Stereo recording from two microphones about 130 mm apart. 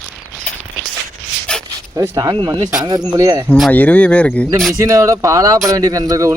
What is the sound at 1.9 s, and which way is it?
Speech, 25° right (ahead or behind).